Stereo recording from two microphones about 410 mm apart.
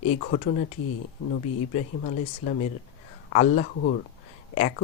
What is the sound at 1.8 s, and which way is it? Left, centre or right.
Speech, left.